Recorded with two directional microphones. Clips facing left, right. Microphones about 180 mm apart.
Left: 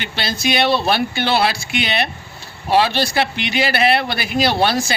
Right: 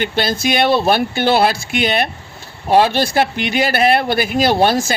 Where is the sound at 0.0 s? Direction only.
50° right (ahead or behind).